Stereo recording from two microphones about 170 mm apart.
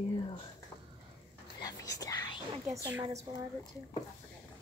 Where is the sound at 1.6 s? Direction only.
20° left (ahead or behind).